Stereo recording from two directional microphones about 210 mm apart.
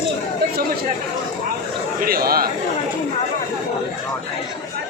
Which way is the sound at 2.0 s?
45° right (ahead or behind).